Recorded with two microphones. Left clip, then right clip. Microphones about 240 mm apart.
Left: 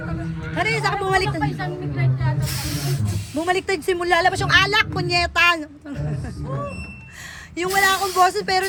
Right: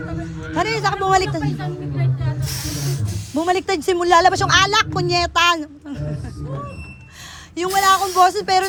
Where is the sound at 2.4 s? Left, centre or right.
Right.